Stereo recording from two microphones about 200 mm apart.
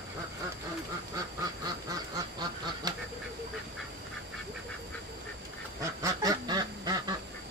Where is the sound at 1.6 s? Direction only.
20° right (ahead or behind).